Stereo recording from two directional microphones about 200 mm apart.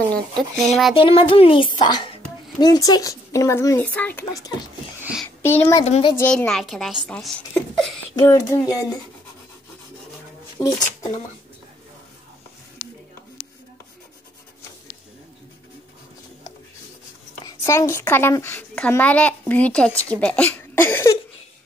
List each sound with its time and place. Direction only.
0.1 s speech: centre (ahead or behind)
0.9 s a woman's voice: 25° left (ahead or behind)
5.0 s a sound: 5° right (ahead or behind)
5.4 s a woman's voice: 10° left (ahead or behind)
5.9 s a woman's voice: 30° left (ahead or behind)
6.1 s a child's voice: 5° left (ahead or behind)
8.2 s a woman's voice: 15° left (ahead or behind)
17.5 s a woman's voice: 15° left (ahead or behind)